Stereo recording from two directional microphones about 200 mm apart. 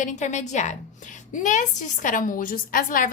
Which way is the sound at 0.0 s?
35° left (ahead or behind).